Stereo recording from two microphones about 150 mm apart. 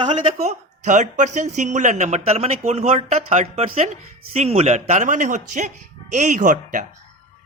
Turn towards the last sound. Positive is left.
turn(degrees=-60)  # may be behind; listen again after turning